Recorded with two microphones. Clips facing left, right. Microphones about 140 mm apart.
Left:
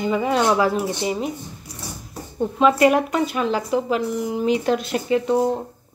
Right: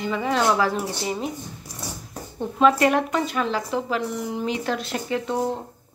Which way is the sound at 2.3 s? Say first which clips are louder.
Left 2 dB; 10° left (ahead or behind).